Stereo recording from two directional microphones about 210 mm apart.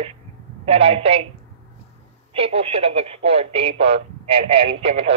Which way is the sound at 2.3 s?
25° right (ahead or behind).